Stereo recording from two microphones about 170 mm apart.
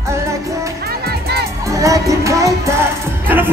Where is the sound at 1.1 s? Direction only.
70° right (ahead or behind).